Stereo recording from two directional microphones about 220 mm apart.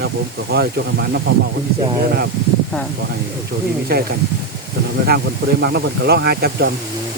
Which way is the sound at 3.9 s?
45° right (ahead or behind).